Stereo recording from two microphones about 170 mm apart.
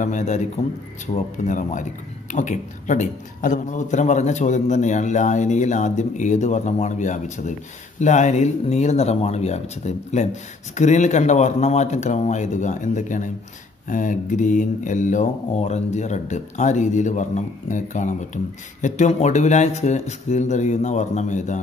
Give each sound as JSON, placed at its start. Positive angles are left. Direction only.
{"t": 0.0, "sound": "speech", "side_deg": 45}